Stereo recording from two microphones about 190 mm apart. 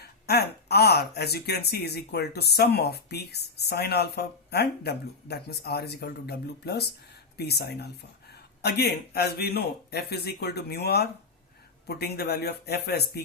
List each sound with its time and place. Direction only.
0.0 s speech: 60° left (ahead or behind)